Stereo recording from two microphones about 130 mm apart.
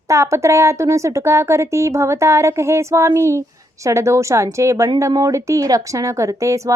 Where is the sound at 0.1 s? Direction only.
20° right (ahead or behind).